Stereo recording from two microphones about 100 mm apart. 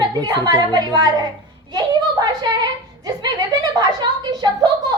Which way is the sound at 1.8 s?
45° right (ahead or behind).